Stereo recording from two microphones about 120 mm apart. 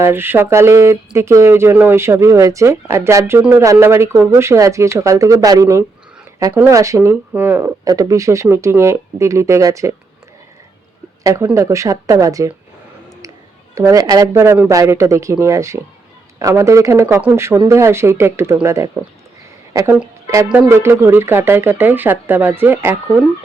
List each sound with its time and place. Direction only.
0.0 s speech: 20° right (ahead or behind)
7.9 s speech: 30° right (ahead or behind)
11.2 s speech: 30° right (ahead or behind)
13.7 s speech: 30° right (ahead or behind)
20.2 s speech: 25° right (ahead or behind)